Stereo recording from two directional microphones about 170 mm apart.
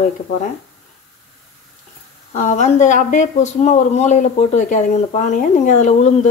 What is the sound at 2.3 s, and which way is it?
Speech, 45° left (ahead or behind).